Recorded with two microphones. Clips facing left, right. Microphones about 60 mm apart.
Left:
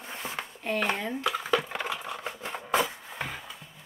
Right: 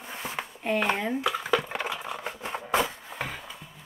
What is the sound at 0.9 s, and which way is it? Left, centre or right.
Speech, centre.